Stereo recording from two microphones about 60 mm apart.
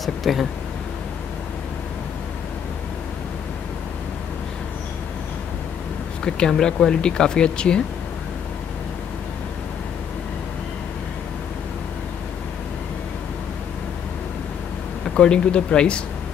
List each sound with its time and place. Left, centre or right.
0.0 s a sound: centre
6.2 s speech: centre
15.1 s speech: centre